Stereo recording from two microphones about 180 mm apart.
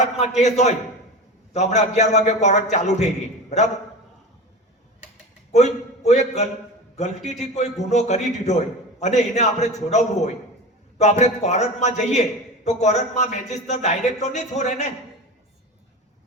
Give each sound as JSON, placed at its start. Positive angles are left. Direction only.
{"t": 0.0, "sound": "a man's voice", "side_deg": 40}
{"t": 5.5, "sound": "a man's voice", "side_deg": 40}